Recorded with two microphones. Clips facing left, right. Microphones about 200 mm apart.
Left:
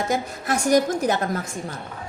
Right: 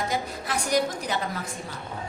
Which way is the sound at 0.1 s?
45° left (ahead or behind).